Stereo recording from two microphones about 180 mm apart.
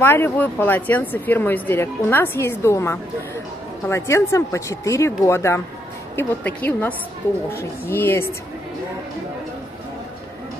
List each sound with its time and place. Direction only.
0.0 s speech: 10° left (ahead or behind)